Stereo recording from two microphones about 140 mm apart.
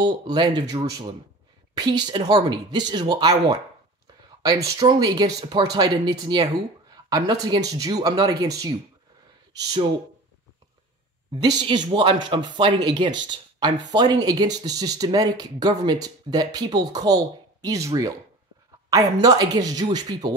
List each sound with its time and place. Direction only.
0.0 s speech: 30° right (ahead or behind)
1.8 s speech: 30° right (ahead or behind)
4.5 s speech: 25° right (ahead or behind)
11.5 s speech: 35° right (ahead or behind)